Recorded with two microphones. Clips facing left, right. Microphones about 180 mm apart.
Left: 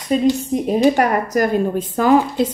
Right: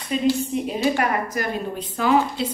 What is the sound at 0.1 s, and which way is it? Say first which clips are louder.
A woman's voice: left 4 dB; 40° left (ahead or behind).